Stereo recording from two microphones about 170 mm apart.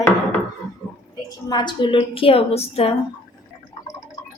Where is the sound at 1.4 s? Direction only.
25° left (ahead or behind).